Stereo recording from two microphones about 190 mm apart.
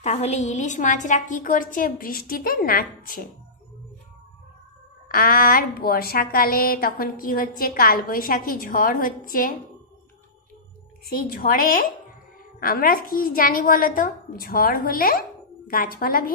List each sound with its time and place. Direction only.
0.0 s a woman's voice: 35° left (ahead or behind)
5.0 s a woman's voice: 50° left (ahead or behind)
11.1 s a woman's voice: 50° left (ahead or behind)